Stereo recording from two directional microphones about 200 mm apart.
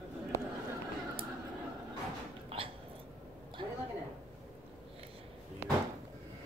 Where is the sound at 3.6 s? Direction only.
25° right (ahead or behind).